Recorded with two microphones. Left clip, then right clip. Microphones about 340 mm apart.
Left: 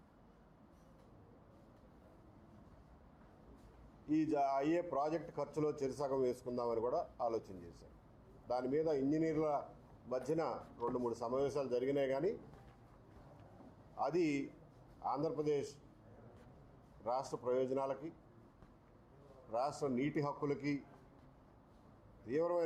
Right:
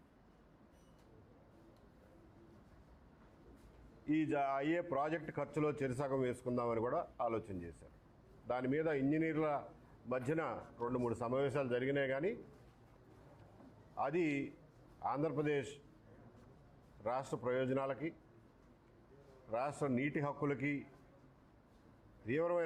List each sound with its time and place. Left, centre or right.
4.1 s a man's voice: right
8.4 s a man's voice: right
13.9 s a man's voice: right
15.4 s a man's voice: right
17.0 s a man's voice: right
19.5 s a man's voice: right
22.3 s a man's voice: right